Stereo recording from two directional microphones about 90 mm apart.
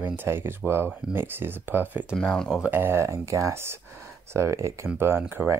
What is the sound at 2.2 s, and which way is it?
Speech, 10° left (ahead or behind).